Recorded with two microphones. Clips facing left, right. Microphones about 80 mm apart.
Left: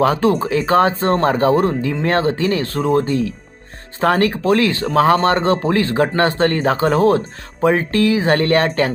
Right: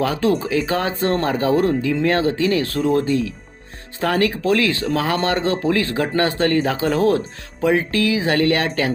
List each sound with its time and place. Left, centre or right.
0.0 s speech: left